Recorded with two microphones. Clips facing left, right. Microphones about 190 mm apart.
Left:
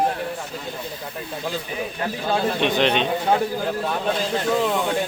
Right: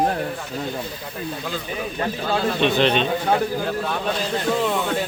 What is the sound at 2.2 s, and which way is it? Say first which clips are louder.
Speech: even; 15° left (ahead or behind).